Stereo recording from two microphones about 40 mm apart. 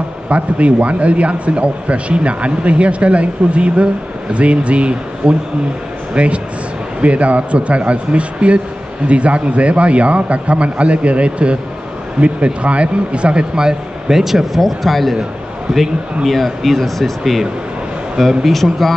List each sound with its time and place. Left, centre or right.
0.3 s a man's voice: right; by 15.1 s centre
16.3 s speech: centre
18.4 s speech: centre